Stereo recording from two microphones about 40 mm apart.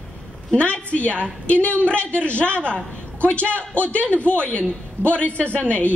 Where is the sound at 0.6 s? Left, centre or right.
Left.